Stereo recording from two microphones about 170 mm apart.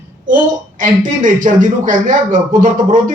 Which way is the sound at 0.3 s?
50° right (ahead or behind).